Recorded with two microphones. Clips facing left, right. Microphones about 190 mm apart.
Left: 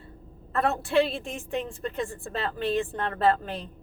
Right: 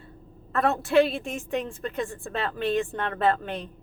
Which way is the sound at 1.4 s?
35° left (ahead or behind).